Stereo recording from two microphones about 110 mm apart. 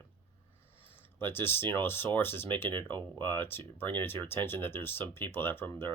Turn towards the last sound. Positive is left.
turn(degrees=20)  # may be behind; listen again after turning